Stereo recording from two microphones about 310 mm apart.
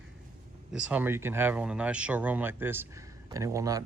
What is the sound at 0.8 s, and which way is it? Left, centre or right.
Speech, centre.